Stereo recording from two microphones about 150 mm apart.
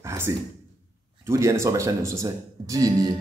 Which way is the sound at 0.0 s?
20° right (ahead or behind).